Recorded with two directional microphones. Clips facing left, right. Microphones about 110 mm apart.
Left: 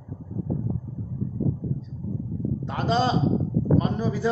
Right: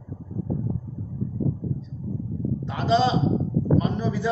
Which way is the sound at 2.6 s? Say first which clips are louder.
Right 2 dB; 45° left (ahead or behind).